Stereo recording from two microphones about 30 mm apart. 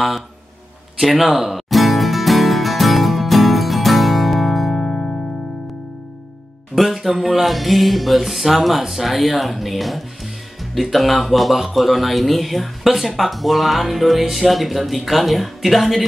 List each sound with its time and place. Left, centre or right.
0.9 s music: centre
4.7 s music: left
6.7 s speech: centre